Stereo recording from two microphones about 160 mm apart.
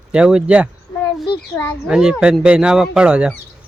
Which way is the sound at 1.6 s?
15° left (ahead or behind).